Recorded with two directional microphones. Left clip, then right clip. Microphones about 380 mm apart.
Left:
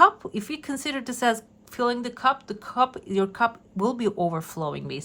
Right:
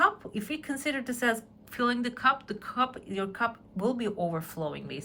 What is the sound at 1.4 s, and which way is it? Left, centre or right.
A woman's voice, centre.